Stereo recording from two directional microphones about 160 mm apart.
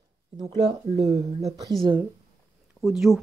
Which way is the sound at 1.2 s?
40° right (ahead or behind).